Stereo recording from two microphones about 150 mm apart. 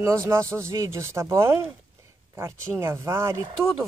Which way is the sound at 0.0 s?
20° right (ahead or behind).